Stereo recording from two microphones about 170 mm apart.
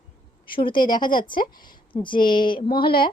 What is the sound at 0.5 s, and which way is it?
A woman's voice, 30° left (ahead or behind).